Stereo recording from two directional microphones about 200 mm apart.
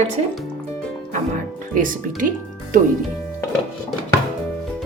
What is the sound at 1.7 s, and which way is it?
Speech, 40° right (ahead or behind).